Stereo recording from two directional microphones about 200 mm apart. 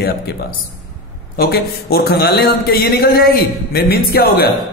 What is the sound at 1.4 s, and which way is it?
A man's voice, 50° left (ahead or behind).